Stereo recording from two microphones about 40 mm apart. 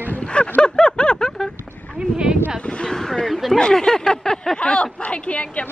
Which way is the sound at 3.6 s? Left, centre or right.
Centre.